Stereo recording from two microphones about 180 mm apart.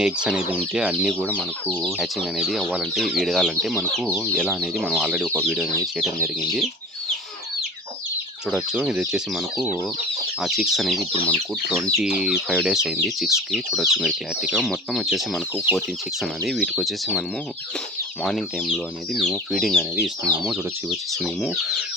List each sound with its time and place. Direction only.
0.0 s speech: 5° right (ahead or behind)
1.2 s speech: 5° left (ahead or behind)
8.4 s speech: 5° right (ahead or behind)